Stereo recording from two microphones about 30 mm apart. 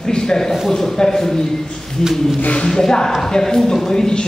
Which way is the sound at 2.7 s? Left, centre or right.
Centre.